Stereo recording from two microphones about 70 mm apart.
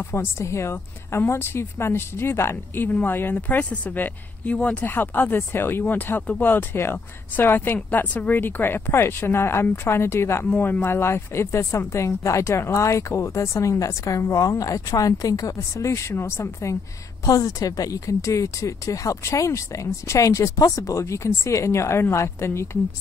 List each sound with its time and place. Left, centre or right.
0.0 s a woman's voice: left
17.2 s speech: left